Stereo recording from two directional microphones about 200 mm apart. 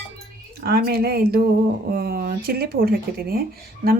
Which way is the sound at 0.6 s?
55° right (ahead or behind).